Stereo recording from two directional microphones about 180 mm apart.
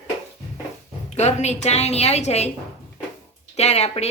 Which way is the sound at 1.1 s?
40° left (ahead or behind).